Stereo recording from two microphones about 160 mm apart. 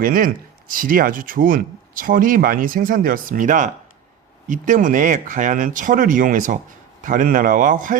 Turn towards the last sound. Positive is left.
turn(degrees=-55)  # may be behind; listen again after turning